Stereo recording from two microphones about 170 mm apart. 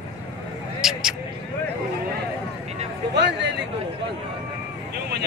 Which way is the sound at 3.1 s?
90° right.